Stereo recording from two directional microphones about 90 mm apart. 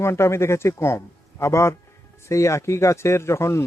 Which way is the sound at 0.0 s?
30° left (ahead or behind).